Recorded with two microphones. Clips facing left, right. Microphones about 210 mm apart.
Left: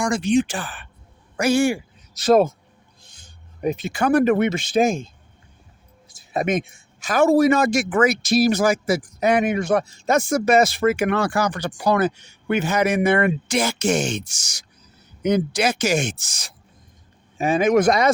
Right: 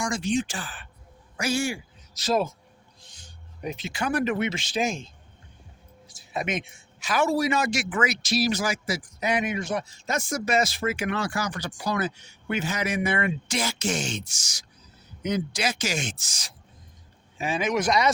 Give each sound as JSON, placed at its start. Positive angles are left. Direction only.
{"t": 0.0, "sound": "a man's voice", "side_deg": 60}
{"t": 3.6, "sound": "a man's voice", "side_deg": 55}
{"t": 6.3, "sound": "a man's voice", "side_deg": 50}